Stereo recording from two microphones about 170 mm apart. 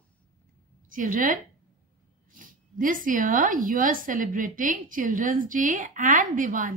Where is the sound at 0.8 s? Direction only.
50° right (ahead or behind).